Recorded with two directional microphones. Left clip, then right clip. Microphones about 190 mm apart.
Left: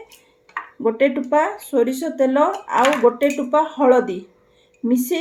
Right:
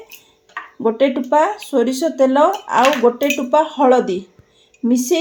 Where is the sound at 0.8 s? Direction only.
30° right (ahead or behind).